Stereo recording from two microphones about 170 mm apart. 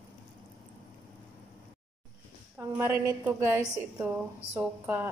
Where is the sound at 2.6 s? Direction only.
15° right (ahead or behind).